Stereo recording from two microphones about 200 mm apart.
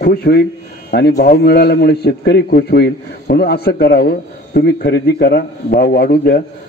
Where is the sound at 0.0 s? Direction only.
50° left (ahead or behind).